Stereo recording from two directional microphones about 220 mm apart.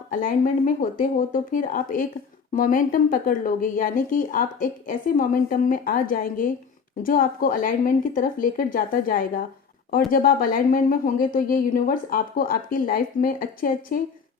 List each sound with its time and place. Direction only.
0.1 s speech: 40° left (ahead or behind)